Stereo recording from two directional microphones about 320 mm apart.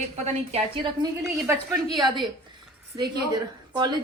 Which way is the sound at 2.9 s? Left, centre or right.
Centre.